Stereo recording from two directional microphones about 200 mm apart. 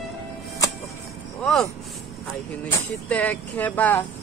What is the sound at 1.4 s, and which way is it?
Speech, centre (ahead or behind).